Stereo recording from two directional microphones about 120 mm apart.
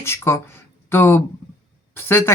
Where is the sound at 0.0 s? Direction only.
20° left (ahead or behind).